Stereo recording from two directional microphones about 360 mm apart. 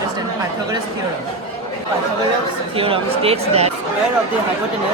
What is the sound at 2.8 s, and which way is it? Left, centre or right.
Speech, centre.